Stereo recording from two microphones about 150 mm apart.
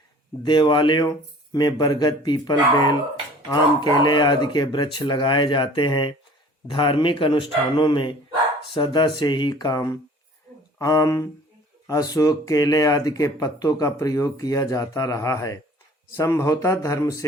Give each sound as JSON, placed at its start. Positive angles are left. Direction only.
{"t": 0.4, "sound": "speech", "side_deg": 30}